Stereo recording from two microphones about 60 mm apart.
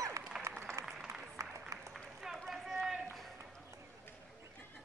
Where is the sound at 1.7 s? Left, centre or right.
Right.